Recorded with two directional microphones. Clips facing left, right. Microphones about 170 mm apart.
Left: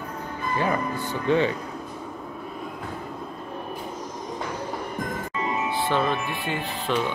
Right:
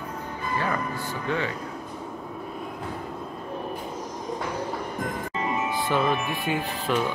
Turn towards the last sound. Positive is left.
turn(degrees=-5)  # may be behind; listen again after turning